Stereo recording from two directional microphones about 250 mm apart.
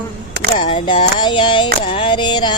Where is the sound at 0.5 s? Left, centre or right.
Left.